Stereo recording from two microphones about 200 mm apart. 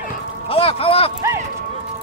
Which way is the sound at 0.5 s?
30° left (ahead or behind).